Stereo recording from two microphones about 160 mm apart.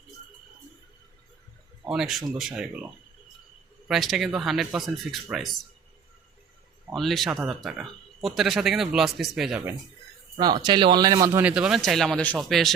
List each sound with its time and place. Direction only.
1.8 s speech: 5° right (ahead or behind)
3.8 s speech: centre (ahead or behind)
6.9 s speech: centre (ahead or behind)
10.3 s speech: 25° right (ahead or behind)
11.4 s speech: 5° right (ahead or behind)